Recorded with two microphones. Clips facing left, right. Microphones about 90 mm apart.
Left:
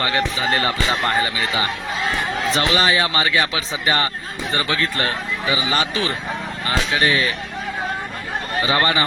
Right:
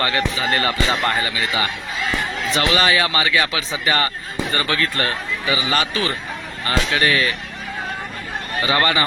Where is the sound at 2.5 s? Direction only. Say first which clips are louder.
Right 1 dB; 25° left (ahead or behind).